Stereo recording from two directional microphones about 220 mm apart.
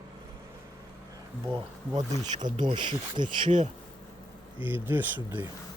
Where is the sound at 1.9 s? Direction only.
35° right (ahead or behind).